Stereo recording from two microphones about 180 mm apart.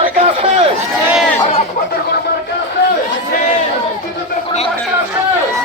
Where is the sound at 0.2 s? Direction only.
35° right (ahead or behind).